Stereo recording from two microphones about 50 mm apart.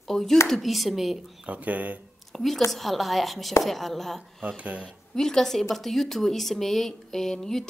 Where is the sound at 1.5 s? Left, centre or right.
Right.